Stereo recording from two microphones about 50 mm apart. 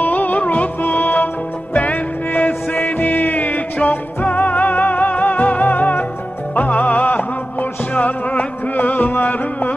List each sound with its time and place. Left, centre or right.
0.0 s music: left